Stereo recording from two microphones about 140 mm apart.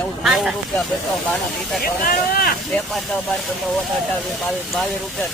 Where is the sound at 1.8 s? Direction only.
90° left.